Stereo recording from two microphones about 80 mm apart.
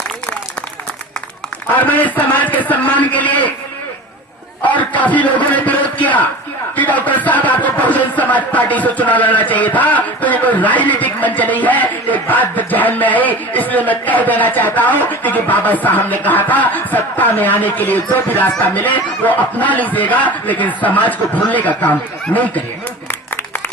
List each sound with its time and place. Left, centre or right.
1.8 s a man's voice: left
4.6 s a sound: centre
4.9 s a man's voice: centre